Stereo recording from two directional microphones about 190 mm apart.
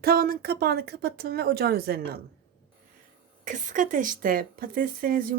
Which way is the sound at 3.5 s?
40° right (ahead or behind).